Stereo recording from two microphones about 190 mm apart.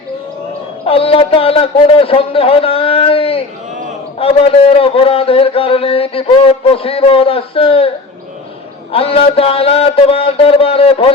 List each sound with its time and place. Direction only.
0.9 s a man's voice: 30° left (ahead or behind)
8.9 s a man's voice: 30° left (ahead or behind)